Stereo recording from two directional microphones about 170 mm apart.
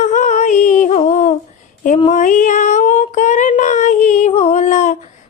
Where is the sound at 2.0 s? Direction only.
40° left (ahead or behind).